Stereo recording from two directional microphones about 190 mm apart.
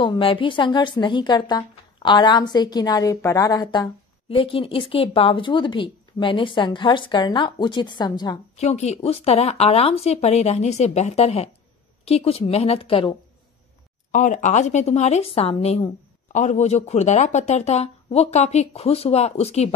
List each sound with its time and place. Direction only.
0.0 s a woman's voice: 25° left (ahead or behind)
8.5 s speech: 35° left (ahead or behind)
14.1 s speech: 40° left (ahead or behind)